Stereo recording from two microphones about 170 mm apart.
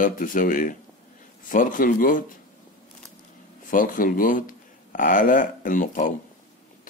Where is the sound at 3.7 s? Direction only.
55° left (ahead or behind).